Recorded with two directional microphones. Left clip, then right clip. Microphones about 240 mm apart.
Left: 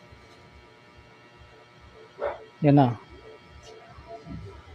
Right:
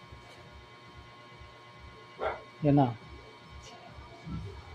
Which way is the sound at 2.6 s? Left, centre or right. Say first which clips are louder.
Left 6 dB; left.